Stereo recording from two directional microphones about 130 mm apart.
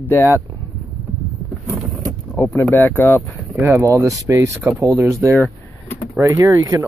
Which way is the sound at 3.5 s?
20° right (ahead or behind).